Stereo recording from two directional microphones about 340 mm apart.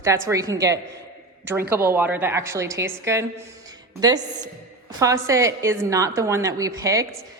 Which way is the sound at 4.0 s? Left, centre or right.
Centre.